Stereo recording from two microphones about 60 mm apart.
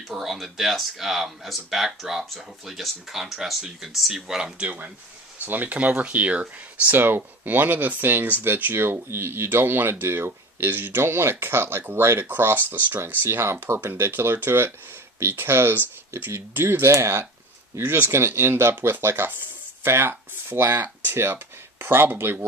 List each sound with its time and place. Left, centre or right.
0.1 s speech: centre
4.6 s speech: right
6.9 s speech: right